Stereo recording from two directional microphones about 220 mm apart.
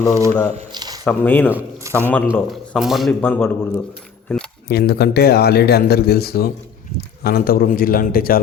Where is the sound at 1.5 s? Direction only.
10° right (ahead or behind).